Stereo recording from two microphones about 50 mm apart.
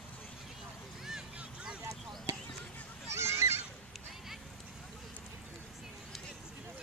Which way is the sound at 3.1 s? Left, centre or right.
Right.